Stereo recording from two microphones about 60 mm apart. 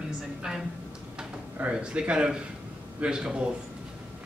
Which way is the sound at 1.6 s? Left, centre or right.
Centre.